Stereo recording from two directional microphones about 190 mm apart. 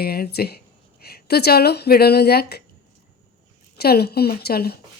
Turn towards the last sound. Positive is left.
turn(degrees=55)  # may be behind; listen again after turning